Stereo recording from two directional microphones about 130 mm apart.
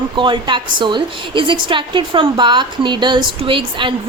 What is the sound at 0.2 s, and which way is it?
A woman's voice, 40° right (ahead or behind).